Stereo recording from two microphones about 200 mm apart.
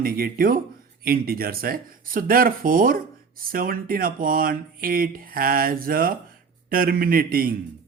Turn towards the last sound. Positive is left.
turn(degrees=-50)  # may be behind; listen again after turning